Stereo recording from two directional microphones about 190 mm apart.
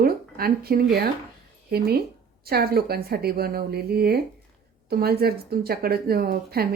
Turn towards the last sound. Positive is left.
turn(degrees=-55)  # may be behind; listen again after turning